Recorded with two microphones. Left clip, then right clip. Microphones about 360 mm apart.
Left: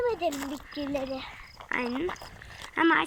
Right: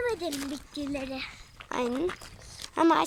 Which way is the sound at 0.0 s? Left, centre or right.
Centre.